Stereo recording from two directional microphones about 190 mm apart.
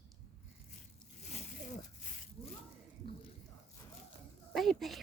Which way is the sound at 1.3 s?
40° left (ahead or behind).